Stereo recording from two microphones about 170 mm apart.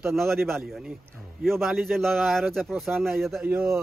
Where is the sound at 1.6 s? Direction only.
Centre (ahead or behind).